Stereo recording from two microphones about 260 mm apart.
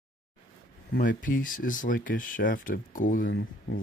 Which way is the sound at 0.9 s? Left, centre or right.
Left.